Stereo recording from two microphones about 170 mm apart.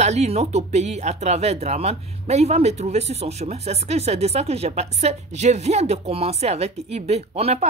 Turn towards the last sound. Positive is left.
turn(degrees=-40)  # may be behind; listen again after turning